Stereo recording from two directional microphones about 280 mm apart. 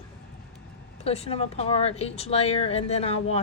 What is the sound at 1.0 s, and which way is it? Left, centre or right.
Speech, left.